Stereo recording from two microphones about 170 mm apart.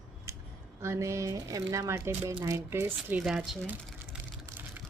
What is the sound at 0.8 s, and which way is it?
A woman's voice, 15° right (ahead or behind).